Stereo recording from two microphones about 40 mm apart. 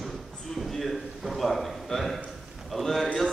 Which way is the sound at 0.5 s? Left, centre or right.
Centre.